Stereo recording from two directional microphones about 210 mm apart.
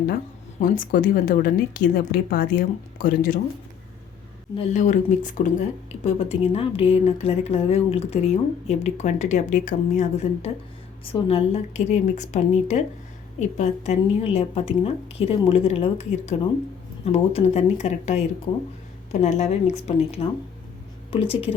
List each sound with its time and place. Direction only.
0.6 s a woman's voice: 40° left (ahead or behind)
4.5 s a woman's voice: 35° left (ahead or behind)